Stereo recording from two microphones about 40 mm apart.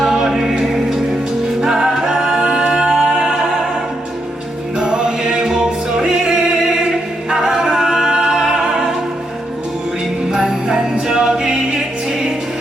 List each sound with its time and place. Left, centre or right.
0.0 s music: centre
1.6 s music: centre
4.8 s music: right
10.3 s music: centre